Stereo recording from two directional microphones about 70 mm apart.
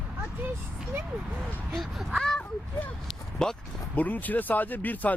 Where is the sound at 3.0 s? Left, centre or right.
Centre.